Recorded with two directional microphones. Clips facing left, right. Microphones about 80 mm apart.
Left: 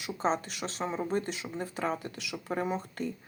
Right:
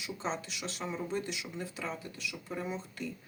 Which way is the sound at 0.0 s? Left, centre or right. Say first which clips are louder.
Left 7 dB; left.